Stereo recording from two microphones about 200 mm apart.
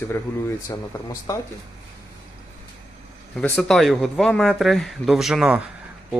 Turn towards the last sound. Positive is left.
turn(degrees=-5)  # may be behind; listen again after turning